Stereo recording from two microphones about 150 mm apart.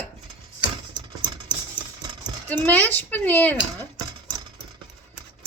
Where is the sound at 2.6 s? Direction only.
10° left (ahead or behind).